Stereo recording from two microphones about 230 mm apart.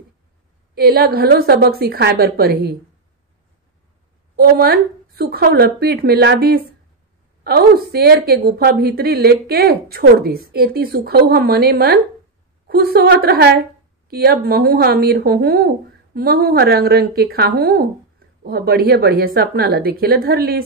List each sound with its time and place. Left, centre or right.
0.7 s a woman's voice: right
4.4 s a woman's voice: right